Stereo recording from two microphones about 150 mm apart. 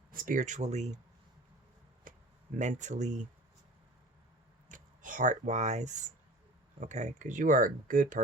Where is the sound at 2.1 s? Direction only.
65° right (ahead or behind).